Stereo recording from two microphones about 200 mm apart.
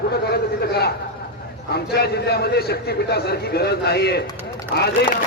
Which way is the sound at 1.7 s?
50° left (ahead or behind).